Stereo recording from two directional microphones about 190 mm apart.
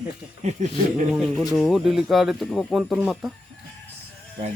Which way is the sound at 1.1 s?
Centre (ahead or behind).